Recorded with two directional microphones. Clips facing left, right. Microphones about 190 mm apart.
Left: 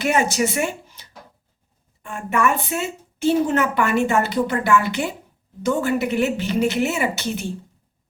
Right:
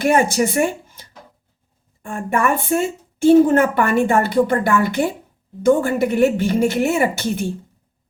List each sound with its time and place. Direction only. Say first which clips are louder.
0.0 s a woman's voice: right 4 dB; 50° right (ahead or behind)
2.0 s a woman's voice: right 2 dB; 50° right (ahead or behind)